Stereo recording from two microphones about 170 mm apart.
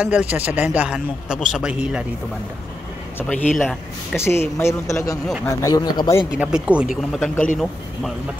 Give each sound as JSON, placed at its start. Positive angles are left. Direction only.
{"t": 0.0, "sound": "a man's voice", "side_deg": -10}
{"t": 3.5, "sound": "a man's voice", "side_deg": 0}
{"t": 4.2, "sound": "speech", "side_deg": 15}
{"t": 6.3, "sound": "a man's voice", "side_deg": -5}